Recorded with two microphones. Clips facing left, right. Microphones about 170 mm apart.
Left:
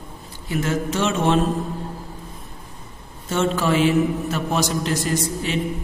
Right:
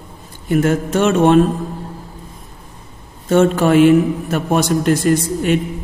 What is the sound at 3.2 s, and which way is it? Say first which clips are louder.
A man's voice: right 8 dB; 55° right (ahead or behind).